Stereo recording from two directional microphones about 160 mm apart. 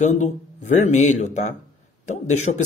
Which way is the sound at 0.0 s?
50° left (ahead or behind).